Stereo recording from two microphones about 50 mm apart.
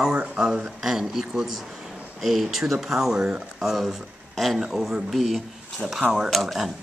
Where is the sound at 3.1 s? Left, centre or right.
Right.